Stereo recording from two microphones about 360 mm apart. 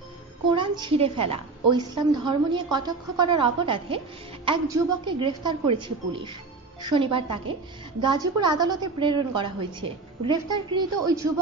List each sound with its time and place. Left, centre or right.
0.5 s a woman's voice: centre
11.2 s speech: right